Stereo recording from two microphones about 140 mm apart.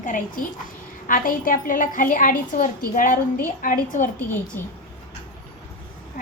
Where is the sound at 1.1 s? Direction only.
90° left; by 4.0 s 70° left (ahead or behind).